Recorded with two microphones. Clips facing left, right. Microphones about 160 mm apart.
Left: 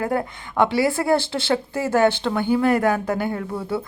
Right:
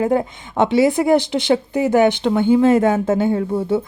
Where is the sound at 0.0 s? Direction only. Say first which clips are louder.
Right 6 dB; 20° right (ahead or behind).